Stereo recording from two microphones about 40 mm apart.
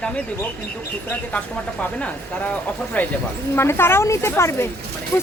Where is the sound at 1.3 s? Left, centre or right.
Left.